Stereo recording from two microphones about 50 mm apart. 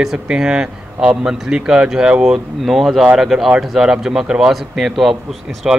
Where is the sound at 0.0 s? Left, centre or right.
Centre.